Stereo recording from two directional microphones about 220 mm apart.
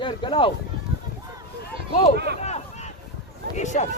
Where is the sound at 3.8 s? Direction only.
30° left (ahead or behind).